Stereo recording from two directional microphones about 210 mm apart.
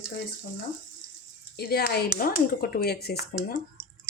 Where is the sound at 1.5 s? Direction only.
50° left (ahead or behind).